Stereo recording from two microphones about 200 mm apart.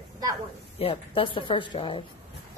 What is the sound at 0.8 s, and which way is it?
Speech, 25° left (ahead or behind).